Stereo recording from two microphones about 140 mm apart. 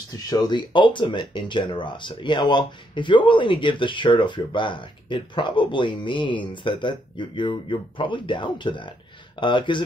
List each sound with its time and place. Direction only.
0.1 s speech: 30° left (ahead or behind)